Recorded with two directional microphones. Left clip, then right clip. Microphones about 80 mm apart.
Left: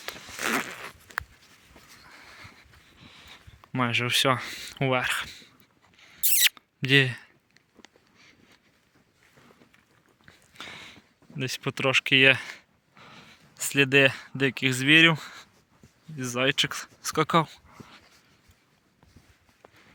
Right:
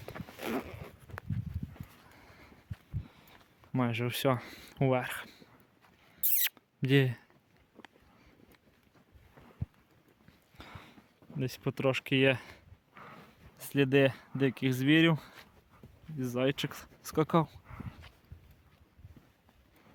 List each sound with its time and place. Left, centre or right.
0.5 s zipper: centre
0.9 s walk: centre
2.0 s a sound: right
3.0 s speech: centre
6.1 s rodents: right
10.6 s a sound: centre
13.7 s speech: centre